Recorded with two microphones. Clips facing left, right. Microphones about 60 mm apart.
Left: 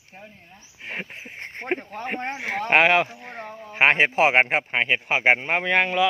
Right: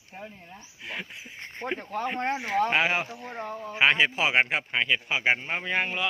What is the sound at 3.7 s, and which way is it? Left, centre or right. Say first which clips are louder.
Speech: left 4 dB; left.